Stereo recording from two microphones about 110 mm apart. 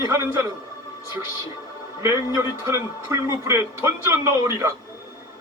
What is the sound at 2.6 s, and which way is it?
Speech, 25° right (ahead or behind).